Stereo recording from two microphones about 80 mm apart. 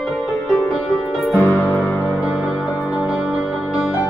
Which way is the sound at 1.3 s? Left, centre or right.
Left.